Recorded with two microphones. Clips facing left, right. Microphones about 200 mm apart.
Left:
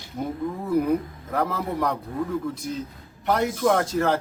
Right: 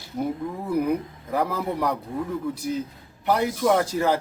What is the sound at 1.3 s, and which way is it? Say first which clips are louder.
Speech: right 1 dB; 10° right (ahead or behind).